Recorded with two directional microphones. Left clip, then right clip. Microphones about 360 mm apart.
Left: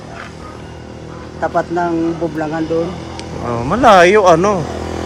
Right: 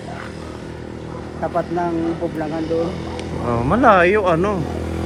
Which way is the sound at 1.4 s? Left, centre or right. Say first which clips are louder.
Left 5 dB; left.